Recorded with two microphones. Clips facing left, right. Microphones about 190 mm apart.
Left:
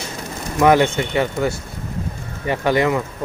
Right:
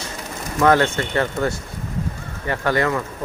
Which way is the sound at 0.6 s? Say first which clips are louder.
Left 2 dB; 15° left (ahead or behind).